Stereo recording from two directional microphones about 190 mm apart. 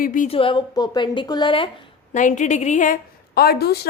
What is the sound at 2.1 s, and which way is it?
A woman's voice, 40° left (ahead or behind).